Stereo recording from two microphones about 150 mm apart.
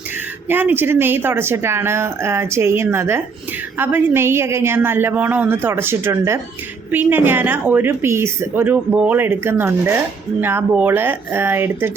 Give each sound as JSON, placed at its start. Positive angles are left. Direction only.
{"t": 0.4, "sound": "a woman's voice", "side_deg": -15}